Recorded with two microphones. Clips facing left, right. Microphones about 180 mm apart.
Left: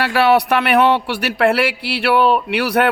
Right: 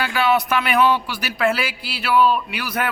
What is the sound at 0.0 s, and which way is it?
Speech, 65° left (ahead or behind).